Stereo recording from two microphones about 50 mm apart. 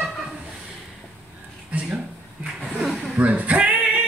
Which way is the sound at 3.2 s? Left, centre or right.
Right.